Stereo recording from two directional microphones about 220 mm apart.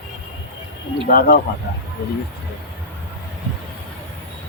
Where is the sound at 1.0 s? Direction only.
40° left (ahead or behind).